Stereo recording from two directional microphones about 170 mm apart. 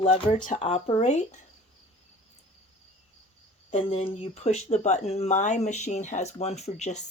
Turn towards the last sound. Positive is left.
turn(degrees=40)  # may be behind; listen again after turning